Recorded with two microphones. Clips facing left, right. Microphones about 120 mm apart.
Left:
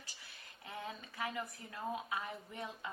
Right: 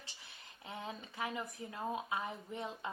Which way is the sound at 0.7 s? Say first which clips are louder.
Right 1 dB; 20° right (ahead or behind).